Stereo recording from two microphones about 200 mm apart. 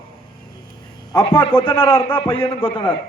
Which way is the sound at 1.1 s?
25° left (ahead or behind).